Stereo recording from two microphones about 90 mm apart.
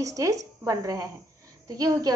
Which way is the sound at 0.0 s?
40° right (ahead or behind).